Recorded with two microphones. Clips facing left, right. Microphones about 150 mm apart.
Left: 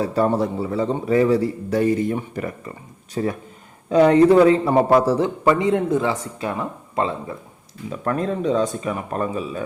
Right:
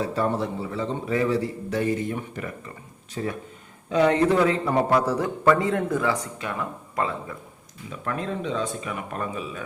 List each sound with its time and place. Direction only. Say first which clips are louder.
0.0 s a man's voice: left 5 dB; 40° left (ahead or behind)
7.9 s a man's voice: left 7 dB; 40° left (ahead or behind)